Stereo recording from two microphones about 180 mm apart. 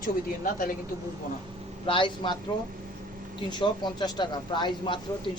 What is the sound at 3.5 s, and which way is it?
A man's voice, 25° left (ahead or behind).